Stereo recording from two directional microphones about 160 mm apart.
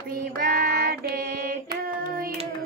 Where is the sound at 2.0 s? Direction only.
65° right (ahead or behind).